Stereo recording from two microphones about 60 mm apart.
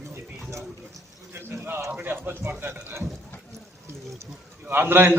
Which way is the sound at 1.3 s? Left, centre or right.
Right.